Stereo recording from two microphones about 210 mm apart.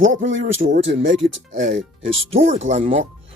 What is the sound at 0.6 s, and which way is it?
Speech, 40° right (ahead or behind).